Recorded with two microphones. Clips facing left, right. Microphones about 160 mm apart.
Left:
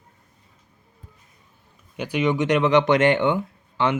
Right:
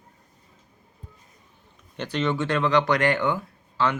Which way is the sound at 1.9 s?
10° left (ahead or behind).